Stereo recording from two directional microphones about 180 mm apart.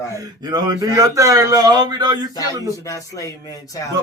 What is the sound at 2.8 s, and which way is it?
Speech, 20° left (ahead or behind).